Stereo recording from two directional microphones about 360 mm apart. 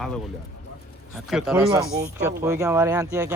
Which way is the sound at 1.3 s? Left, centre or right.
Centre.